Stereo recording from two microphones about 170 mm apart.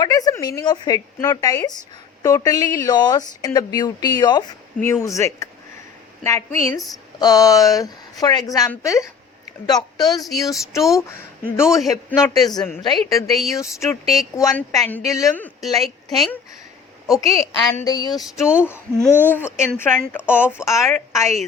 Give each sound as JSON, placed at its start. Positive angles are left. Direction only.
{"t": 0.0, "sound": "a woman's voice", "side_deg": 20}
{"t": 13.3, "sound": "a woman's voice", "side_deg": 0}
{"t": 13.6, "sound": "a woman's voice", "side_deg": 15}
{"t": 15.6, "sound": "a woman's voice", "side_deg": 0}
{"t": 17.8, "sound": "speech", "side_deg": 25}
{"t": 18.1, "sound": "a woman's voice", "side_deg": 0}
{"t": 19.3, "sound": "a woman's voice", "side_deg": 10}